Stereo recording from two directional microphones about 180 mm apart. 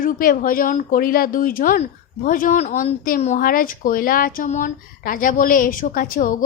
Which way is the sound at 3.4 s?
50° left (ahead or behind).